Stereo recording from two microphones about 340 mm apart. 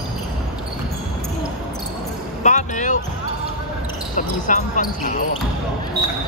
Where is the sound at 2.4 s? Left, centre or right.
Left.